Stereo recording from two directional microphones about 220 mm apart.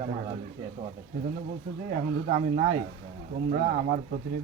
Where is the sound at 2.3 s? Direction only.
35° right (ahead or behind).